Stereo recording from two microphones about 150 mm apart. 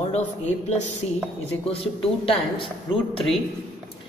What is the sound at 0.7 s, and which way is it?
A woman's voice, 50° left (ahead or behind).